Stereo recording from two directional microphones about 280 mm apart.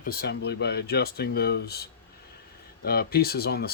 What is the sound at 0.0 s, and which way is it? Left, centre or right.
Speech, left.